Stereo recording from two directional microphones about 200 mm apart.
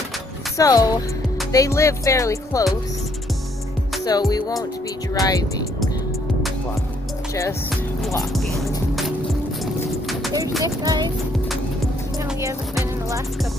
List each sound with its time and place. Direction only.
0.6 s music: 15° left (ahead or behind)
4.0 s speech: 20° left (ahead or behind)
5.2 s music: 20° left (ahead or behind)
8.3 s music: centre (ahead or behind)
10.6 s speech: 20° right (ahead or behind)